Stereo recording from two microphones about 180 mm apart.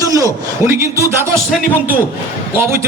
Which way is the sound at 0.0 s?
20° right (ahead or behind).